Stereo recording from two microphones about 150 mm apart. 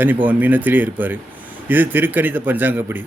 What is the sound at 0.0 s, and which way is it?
Speech, 10° right (ahead or behind).